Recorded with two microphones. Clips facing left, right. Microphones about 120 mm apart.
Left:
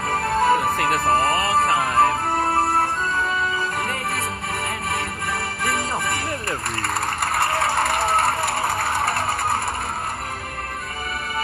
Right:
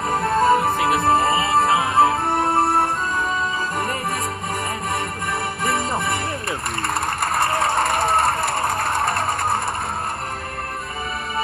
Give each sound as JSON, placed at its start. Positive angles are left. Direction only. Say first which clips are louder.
{"t": 0.4, "sound": "music", "louder": "right 2 dB", "side_deg": 0}
{"t": 2.5, "sound": "music", "louder": "right 2 dB", "side_deg": -25}
{"t": 5.6, "sound": "music", "louder": "right 2 dB", "side_deg": -20}
{"t": 7.3, "sound": "a sound", "louder": "right 1 dB", "side_deg": -20}
{"t": 7.8, "sound": "vehicle", "louder": "right 1 dB", "side_deg": 5}